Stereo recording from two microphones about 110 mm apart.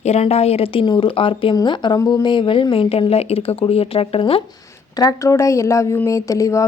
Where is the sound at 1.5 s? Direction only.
45° left (ahead or behind).